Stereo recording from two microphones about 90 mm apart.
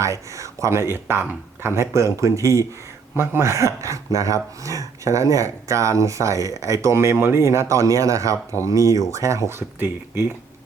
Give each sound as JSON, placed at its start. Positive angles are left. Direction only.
{"t": 0.0, "sound": "speech", "side_deg": -35}